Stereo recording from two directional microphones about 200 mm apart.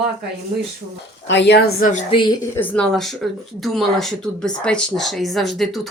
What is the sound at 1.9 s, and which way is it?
Speech, 30° left (ahead or behind).